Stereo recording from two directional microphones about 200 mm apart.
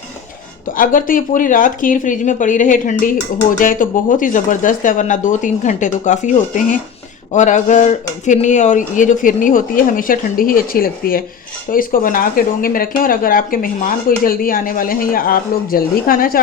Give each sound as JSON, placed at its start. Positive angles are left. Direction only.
{"t": 0.8, "sound": "speech", "side_deg": 45}